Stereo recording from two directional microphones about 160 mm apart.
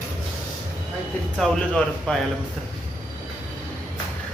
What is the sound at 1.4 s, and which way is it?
Speech, 5° left (ahead or behind).